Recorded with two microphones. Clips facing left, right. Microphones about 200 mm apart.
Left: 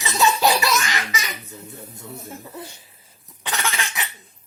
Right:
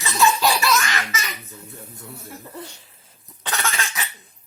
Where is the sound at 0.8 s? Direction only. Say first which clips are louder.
Even; 15° left (ahead or behind).